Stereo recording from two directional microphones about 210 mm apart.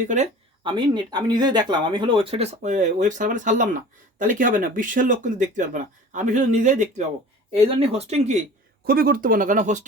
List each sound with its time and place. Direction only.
0.6 s speech: 20° right (ahead or behind)
8.8 s speech: 45° right (ahead or behind)